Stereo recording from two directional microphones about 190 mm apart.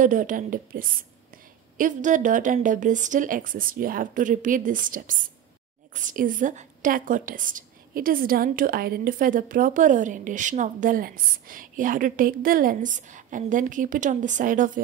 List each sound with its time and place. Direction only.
0.0 s a woman's voice: 45° right (ahead or behind)